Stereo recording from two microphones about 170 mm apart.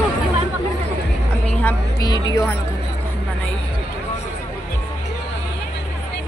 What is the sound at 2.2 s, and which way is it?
Speech, 20° left (ahead or behind).